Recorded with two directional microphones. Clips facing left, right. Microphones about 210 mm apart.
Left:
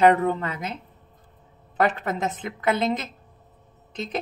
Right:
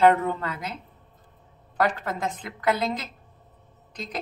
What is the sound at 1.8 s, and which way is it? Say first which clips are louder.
Speech: left 2 dB; 20° left (ahead or behind).